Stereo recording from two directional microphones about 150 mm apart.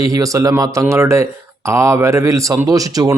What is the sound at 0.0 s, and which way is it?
Speech, 25° right (ahead or behind).